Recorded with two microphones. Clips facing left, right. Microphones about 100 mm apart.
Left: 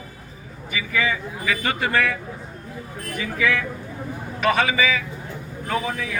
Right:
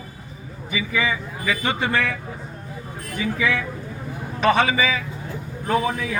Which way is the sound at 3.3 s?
20° right (ahead or behind).